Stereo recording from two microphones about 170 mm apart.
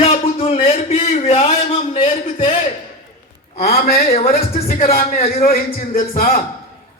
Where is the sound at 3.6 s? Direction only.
65° left (ahead or behind).